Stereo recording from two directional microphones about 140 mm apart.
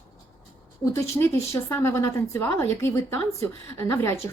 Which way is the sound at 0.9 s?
20° left (ahead or behind).